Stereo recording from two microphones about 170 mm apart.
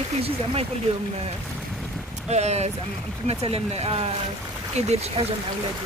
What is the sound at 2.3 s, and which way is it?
Speech, 40° right (ahead or behind).